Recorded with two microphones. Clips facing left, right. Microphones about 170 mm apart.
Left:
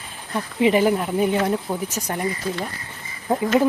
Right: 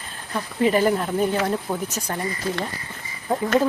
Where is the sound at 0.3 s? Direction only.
15° left (ahead or behind).